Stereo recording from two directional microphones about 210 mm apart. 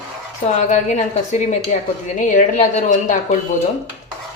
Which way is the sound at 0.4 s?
35° left (ahead or behind).